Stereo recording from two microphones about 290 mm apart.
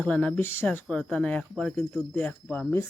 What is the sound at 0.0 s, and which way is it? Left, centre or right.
Speech, centre.